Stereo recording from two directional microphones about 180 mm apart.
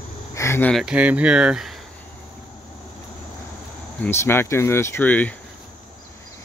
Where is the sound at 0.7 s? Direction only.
5° right (ahead or behind).